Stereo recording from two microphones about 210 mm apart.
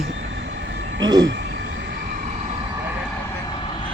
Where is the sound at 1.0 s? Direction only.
20° right (ahead or behind).